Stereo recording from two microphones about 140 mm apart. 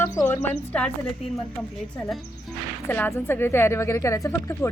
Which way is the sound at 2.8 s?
15° left (ahead or behind).